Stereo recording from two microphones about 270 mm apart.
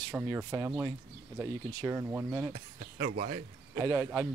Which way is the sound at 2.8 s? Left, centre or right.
Right.